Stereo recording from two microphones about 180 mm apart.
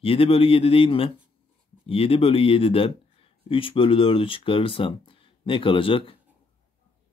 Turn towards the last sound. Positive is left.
turn(degrees=30)  # may be behind; listen again after turning